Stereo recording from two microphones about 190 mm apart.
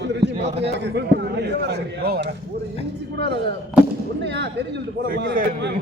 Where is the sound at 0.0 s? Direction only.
65° right (ahead or behind).